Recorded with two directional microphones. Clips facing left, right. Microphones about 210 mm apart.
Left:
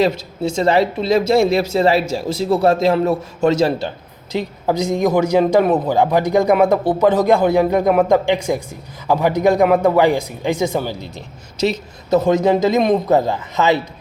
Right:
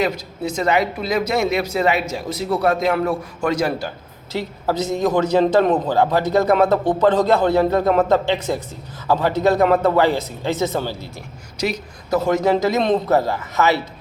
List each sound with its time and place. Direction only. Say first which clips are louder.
0.0 s a woman's voice: left 4 dB; 30° left (ahead or behind)
11.5 s a woman's voice: left 5 dB; 25° left (ahead or behind)